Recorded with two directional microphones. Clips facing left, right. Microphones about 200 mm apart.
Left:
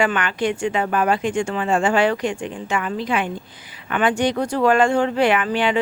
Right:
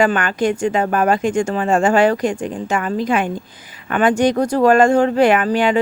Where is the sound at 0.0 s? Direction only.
40° right (ahead or behind).